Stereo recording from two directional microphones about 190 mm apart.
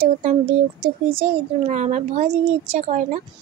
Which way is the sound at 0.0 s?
35° right (ahead or behind).